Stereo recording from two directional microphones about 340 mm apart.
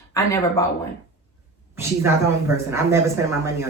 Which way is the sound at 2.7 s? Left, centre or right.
Centre.